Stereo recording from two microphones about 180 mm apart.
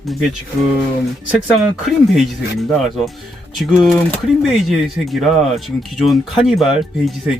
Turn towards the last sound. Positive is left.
turn(degrees=0)  # may be behind; listen again after turning